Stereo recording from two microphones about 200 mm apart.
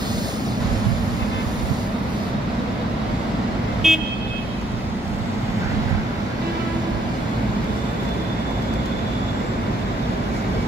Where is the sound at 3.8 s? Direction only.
Centre (ahead or behind).